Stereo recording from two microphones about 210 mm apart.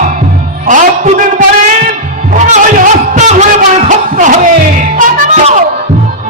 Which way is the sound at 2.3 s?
35° right (ahead or behind).